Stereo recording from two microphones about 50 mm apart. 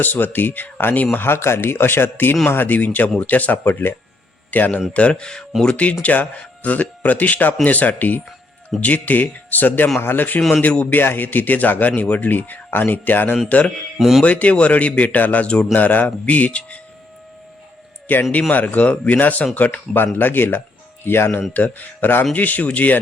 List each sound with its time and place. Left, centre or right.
0.0 s speech: left
1.1 s speech: left
4.9 s speech: left
5.6 s speech: left
13.5 s speech: left
18.1 s speech: left
20.1 s speech: left
21.5 s speech: left